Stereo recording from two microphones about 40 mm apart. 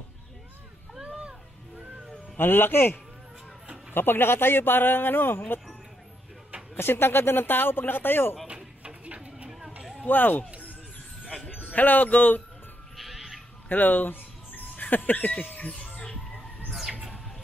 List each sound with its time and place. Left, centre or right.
1.0 s music: right
2.3 s speech: left
6.8 s speech: left
8.5 s a sound: right
9.5 s a sound: centre
10.0 s speech: left
11.6 s speech: left
12.9 s music: centre
13.7 s speech: left